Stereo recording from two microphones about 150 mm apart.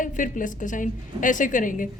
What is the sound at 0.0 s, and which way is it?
A woman's voice, 60° left (ahead or behind).